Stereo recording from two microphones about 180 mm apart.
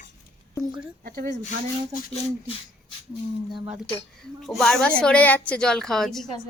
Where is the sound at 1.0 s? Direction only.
55° right (ahead or behind).